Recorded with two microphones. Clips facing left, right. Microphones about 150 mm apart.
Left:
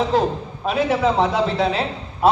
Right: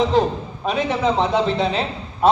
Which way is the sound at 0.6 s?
5° left (ahead or behind).